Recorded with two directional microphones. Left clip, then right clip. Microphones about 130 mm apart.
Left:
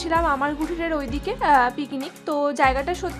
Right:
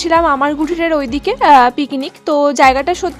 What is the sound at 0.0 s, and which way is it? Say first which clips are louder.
A woman's voice: right 9 dB; 60° right (ahead or behind).